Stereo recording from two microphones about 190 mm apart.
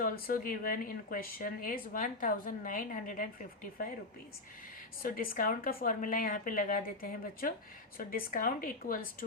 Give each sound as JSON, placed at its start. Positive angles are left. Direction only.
{"t": 0.0, "sound": "speech", "side_deg": 45}
{"t": 5.0, "sound": "speech", "side_deg": 50}